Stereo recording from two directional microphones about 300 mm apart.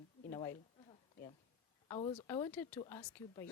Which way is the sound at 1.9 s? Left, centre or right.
Centre.